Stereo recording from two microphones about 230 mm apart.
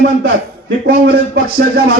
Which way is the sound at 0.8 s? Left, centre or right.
Right.